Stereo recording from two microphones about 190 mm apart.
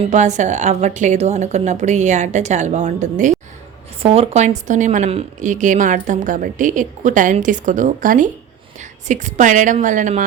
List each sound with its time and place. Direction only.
0.0 s speech: 40° right (ahead or behind)